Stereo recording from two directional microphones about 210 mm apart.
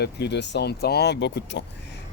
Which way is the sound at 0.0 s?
55° left (ahead or behind).